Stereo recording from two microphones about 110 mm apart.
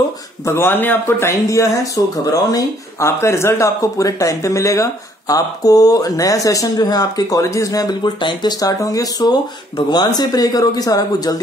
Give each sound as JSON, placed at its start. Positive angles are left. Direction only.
{"t": 0.5, "sound": "speech", "side_deg": 20}